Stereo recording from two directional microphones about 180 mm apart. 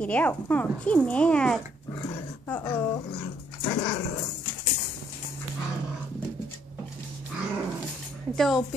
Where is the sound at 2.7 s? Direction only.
10° left (ahead or behind).